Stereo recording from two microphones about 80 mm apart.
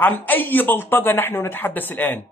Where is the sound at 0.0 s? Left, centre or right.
Left.